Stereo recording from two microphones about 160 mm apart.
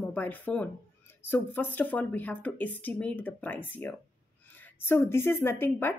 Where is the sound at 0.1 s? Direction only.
10° left (ahead or behind).